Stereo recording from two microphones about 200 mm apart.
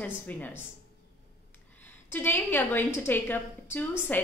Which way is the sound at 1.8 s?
10° left (ahead or behind).